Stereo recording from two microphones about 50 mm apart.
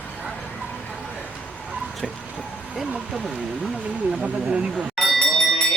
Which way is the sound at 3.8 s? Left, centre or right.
Centre.